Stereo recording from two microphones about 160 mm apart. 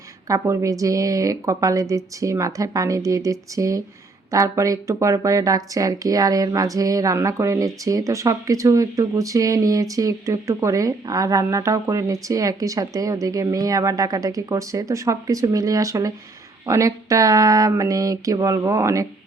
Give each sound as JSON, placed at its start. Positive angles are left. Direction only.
{"t": 0.3, "sound": "speech", "side_deg": -20}